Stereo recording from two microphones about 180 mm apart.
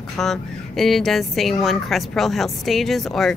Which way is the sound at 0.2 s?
Centre (ahead or behind).